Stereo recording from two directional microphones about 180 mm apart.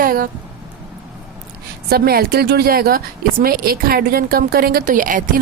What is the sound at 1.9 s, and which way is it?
A woman's voice, 60° right (ahead or behind).